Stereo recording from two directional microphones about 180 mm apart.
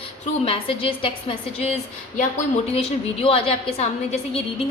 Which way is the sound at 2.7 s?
30° left (ahead or behind).